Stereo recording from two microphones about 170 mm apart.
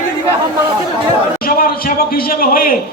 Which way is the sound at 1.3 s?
60° left (ahead or behind).